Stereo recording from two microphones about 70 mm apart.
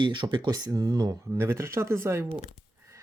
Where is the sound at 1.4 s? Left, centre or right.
Right.